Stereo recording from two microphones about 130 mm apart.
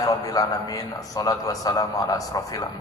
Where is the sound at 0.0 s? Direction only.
25° left (ahead or behind).